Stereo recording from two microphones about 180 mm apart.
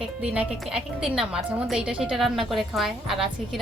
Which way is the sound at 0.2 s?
5° right (ahead or behind).